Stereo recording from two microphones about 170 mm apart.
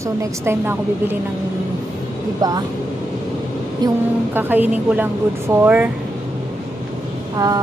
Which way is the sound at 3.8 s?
25° right (ahead or behind).